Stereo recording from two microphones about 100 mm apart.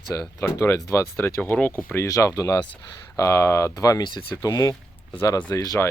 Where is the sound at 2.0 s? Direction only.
35° left (ahead or behind).